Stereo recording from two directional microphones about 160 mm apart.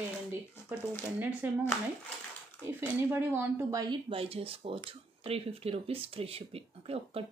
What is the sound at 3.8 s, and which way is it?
Speech, 30° right (ahead or behind).